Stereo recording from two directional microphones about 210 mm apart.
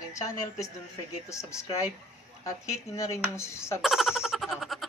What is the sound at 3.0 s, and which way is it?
Speech, 15° left (ahead or behind).